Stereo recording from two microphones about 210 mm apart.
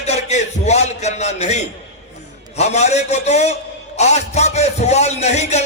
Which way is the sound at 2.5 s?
30° left (ahead or behind).